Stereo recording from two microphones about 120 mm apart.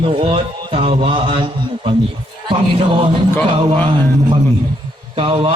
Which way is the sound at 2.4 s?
45° right (ahead or behind).